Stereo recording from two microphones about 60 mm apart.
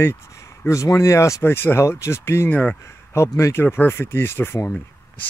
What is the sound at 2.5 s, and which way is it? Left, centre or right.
Speech, centre.